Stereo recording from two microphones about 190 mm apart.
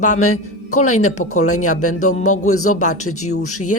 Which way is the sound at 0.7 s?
40° left (ahead or behind).